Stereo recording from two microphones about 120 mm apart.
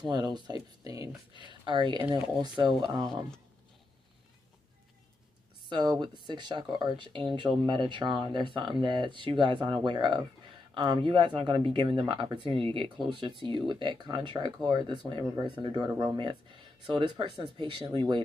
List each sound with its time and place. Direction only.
0.0 s speech: 35° right (ahead or behind)
1.3 s speech: 40° right (ahead or behind)
5.7 s speech: 40° right (ahead or behind)